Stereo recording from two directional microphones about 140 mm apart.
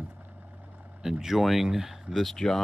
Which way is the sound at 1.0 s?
5° right (ahead or behind).